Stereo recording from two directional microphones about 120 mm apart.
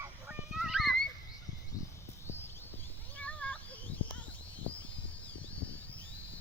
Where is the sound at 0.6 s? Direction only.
Centre (ahead or behind).